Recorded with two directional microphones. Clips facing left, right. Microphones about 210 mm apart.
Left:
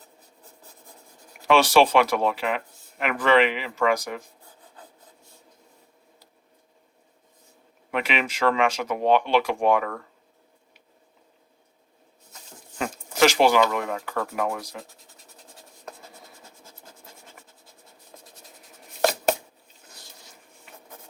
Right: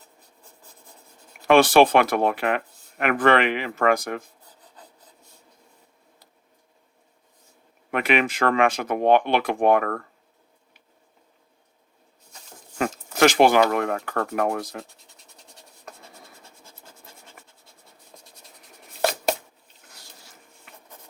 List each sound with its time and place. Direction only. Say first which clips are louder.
1.5 s speech: right 3 dB; 55° right (ahead or behind)
7.9 s speech: right 4 dB; 55° right (ahead or behind)
12.8 s speech: right 2 dB; 55° right (ahead or behind)